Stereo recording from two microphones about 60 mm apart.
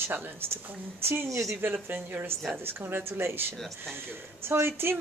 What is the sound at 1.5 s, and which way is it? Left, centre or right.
A woman's voice, right.